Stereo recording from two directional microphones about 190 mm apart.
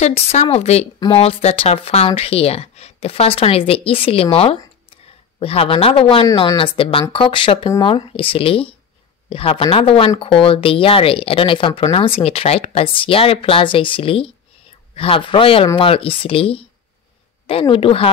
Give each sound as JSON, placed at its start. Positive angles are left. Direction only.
{"t": 0.0, "sound": "speech", "side_deg": 35}